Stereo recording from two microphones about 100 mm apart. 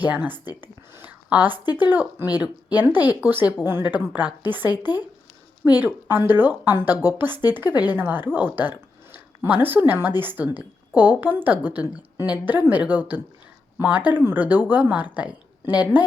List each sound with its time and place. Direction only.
0.4 s speech: 45° left (ahead or behind)
0.9 s a woman's voice: 20° right (ahead or behind)
9.1 s a sound: 20° right (ahead or behind)
9.9 s a woman's voice: 20° right (ahead or behind)